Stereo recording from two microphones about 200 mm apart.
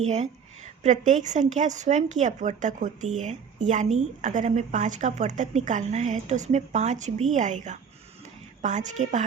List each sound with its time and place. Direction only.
0.1 s a woman's voice: 35° right (ahead or behind)